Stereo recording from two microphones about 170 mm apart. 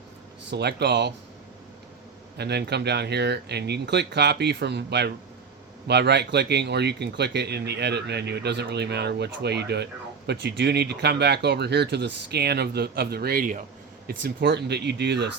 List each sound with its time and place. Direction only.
0.5 s speech: 80° right
2.4 s speech: 75° right (ahead or behind)